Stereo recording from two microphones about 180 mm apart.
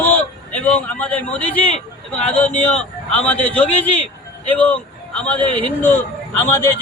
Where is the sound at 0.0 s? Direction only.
10° left (ahead or behind).